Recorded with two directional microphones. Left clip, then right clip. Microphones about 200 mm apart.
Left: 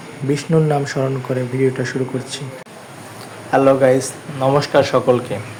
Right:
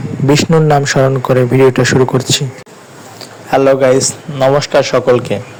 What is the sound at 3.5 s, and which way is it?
A man's voice, 35° right (ahead or behind).